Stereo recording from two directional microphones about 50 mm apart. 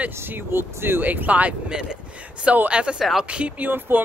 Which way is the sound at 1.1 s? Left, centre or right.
Right.